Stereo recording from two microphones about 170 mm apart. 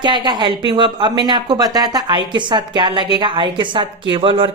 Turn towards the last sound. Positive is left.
turn(degrees=-30)  # may be behind; listen again after turning